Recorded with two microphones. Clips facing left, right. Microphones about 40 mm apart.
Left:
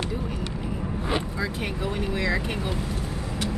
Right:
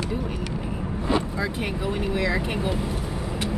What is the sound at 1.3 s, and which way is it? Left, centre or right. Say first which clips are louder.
Speech: right 2 dB; centre.